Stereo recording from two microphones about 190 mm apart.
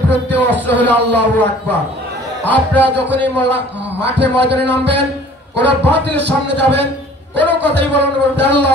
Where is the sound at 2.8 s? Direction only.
65° right (ahead or behind).